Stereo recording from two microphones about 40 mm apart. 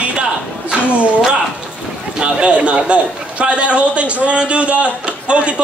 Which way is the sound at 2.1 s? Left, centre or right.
Right.